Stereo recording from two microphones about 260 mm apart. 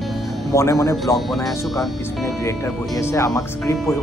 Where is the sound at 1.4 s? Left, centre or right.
Centre.